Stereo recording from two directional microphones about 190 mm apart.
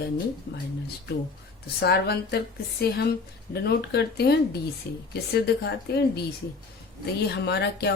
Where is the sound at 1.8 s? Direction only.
60° left (ahead or behind).